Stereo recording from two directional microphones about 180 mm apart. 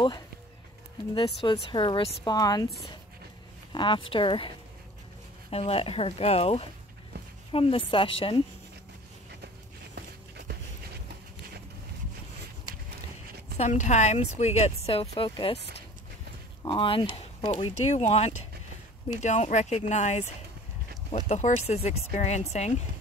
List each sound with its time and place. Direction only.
1.1 s speech: 30° left (ahead or behind)
3.7 s speech: 25° left (ahead or behind)
9.9 s a sound: 65° right (ahead or behind)
13.6 s speech: 40° left (ahead or behind)
16.6 s speech: 30° left (ahead or behind)
21.3 s speech: 40° left (ahead or behind)